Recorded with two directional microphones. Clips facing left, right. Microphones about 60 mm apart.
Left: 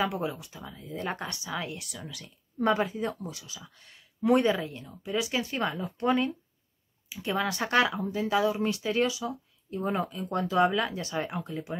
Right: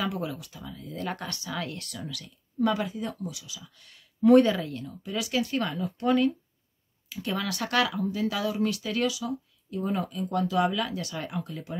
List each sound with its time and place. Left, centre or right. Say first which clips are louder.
0.2 s speech: left 1 dB; left
2.0 s speech: right 3 dB; left
4.3 s speech: right 5 dB; centre